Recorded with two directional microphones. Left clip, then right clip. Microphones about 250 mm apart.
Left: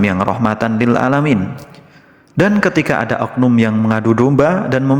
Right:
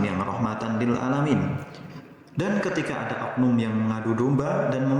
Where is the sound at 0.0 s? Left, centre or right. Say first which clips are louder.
Left 12 dB; left.